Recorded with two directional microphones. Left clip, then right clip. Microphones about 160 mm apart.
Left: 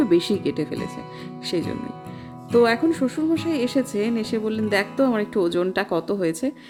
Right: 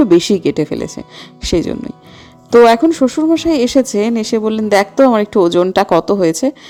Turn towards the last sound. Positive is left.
turn(degrees=-30)  # may be behind; listen again after turning